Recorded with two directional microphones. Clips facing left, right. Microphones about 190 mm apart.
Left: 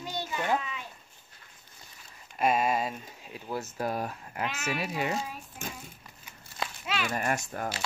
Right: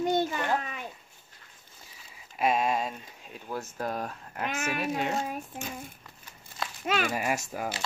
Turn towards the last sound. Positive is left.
turn(degrees=-5)  # may be behind; listen again after turning